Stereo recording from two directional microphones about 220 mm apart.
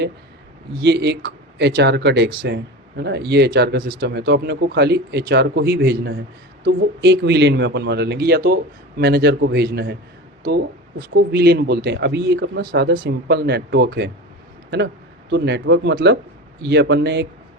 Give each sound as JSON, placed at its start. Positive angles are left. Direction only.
{"t": 0.8, "sound": "speech", "side_deg": -50}
{"t": 11.1, "sound": "speech", "side_deg": -50}
{"t": 15.3, "sound": "speech", "side_deg": -50}